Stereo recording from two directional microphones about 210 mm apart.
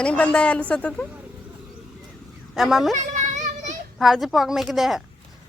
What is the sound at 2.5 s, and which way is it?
Speech, centre (ahead or behind).